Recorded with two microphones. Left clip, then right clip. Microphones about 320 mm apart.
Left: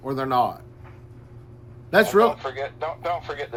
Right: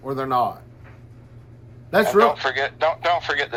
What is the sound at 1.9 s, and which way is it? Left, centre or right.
Speech, centre.